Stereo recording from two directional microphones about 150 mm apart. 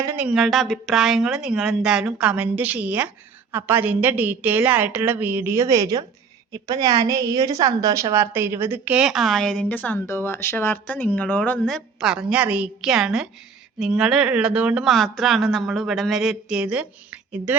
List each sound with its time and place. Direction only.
0.2 s a woman's voice: 5° right (ahead or behind)